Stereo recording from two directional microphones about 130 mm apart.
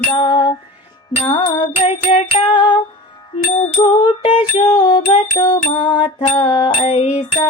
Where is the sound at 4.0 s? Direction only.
40° left (ahead or behind).